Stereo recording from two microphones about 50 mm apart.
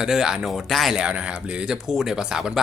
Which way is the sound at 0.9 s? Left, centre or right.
Right.